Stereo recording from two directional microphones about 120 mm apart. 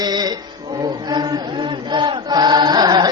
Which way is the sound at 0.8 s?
35° right (ahead or behind).